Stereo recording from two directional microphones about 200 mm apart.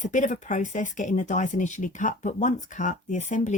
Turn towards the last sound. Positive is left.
turn(degrees=35)  # may be behind; listen again after turning